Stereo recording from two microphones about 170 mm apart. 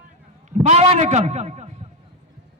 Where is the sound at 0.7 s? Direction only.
40° right (ahead or behind).